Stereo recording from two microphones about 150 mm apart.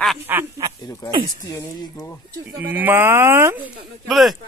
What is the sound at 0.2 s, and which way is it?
Speech, 15° right (ahead or behind).